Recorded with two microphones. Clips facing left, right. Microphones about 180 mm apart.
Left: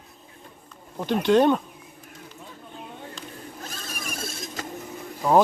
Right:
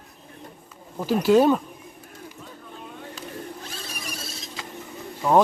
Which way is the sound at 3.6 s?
45° left (ahead or behind).